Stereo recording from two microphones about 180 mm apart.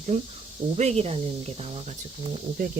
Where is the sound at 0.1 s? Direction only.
35° right (ahead or behind).